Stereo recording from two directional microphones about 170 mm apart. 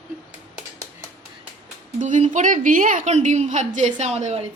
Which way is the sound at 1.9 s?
45° right (ahead or behind).